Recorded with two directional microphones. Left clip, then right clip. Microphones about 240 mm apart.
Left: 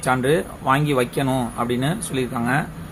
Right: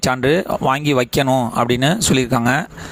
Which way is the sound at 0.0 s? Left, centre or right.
Right.